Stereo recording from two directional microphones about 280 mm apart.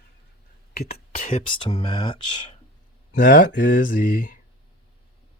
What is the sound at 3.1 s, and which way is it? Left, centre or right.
Speech, left.